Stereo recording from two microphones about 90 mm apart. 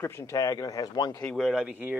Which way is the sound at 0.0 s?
30° left (ahead or behind).